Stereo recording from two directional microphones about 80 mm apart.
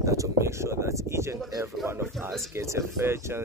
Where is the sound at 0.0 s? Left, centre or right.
Right.